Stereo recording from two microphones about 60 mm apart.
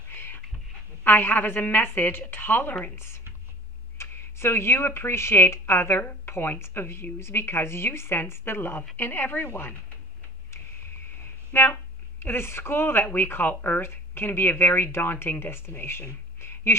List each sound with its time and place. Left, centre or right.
0.1 s goat: left
1.0 s speech: left
4.0 s speech: left
11.5 s speech: left